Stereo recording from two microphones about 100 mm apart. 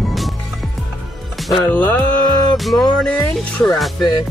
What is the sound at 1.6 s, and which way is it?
Speech, 15° left (ahead or behind).